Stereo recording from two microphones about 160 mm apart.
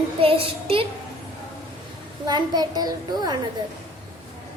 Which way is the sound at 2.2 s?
25° right (ahead or behind).